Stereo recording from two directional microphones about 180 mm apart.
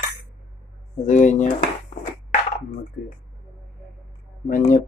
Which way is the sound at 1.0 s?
45° left (ahead or behind).